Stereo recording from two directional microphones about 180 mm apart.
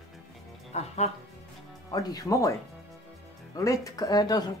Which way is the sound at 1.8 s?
20° left (ahead or behind).